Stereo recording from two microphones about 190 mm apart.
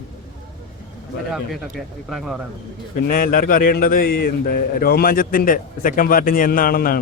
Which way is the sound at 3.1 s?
50° left (ahead or behind).